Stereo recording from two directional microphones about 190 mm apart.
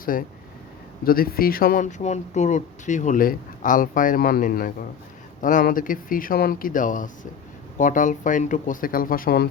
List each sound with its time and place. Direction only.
0.0 s speech: 45° left (ahead or behind)